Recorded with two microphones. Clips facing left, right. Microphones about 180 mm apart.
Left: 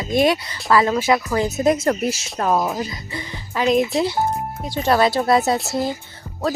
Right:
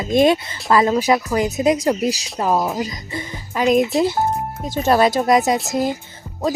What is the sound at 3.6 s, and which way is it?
Speech, centre (ahead or behind).